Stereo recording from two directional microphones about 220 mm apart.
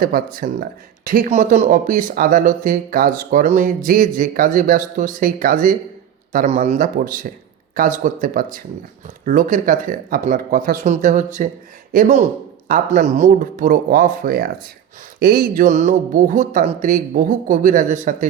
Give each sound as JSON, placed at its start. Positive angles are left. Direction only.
{"t": 0.0, "sound": "speech", "side_deg": -40}